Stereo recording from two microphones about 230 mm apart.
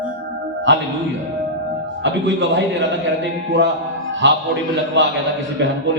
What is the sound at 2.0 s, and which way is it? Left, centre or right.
A man's voice, right.